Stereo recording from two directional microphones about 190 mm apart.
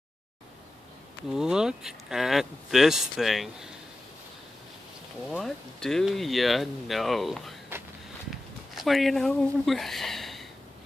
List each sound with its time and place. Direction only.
1.3 s speech: 5° right (ahead or behind)
5.3 s speech: 5° left (ahead or behind)
8.7 s speech: centre (ahead or behind)